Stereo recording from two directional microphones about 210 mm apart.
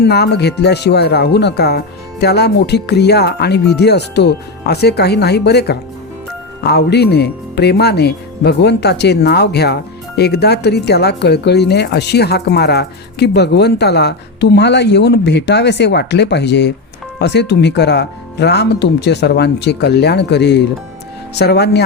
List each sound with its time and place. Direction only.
0.0 s speech: 50° left (ahead or behind)